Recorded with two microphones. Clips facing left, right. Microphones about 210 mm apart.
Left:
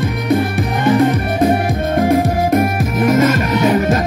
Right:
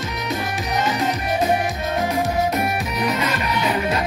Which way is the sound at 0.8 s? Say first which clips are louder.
Left 13 dB; 55° left (ahead or behind).